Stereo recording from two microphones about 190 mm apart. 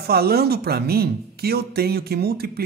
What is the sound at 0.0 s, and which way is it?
Speech, 55° right (ahead or behind).